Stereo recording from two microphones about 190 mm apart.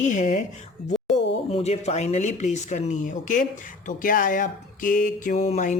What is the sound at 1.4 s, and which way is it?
Speech, 35° left (ahead or behind).